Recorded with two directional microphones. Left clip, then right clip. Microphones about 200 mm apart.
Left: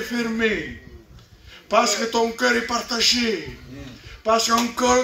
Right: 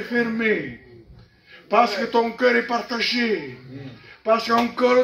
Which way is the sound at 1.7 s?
20° left (ahead or behind).